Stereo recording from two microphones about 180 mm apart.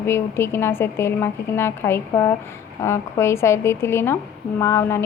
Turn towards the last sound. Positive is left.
turn(degrees=15)  # may be behind; listen again after turning